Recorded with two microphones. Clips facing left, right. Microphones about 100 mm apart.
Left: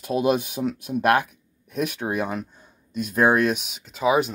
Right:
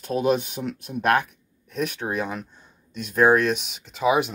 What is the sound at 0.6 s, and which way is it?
Speech, 20° left (ahead or behind).